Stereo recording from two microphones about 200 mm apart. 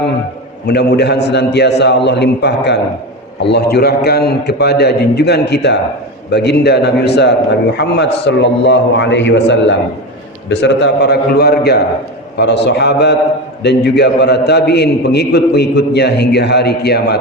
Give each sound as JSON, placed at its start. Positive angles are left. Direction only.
{"t": 0.7, "sound": "a man's voice", "side_deg": 55}